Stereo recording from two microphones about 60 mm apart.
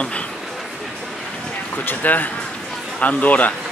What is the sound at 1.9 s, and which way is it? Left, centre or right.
Speech, left.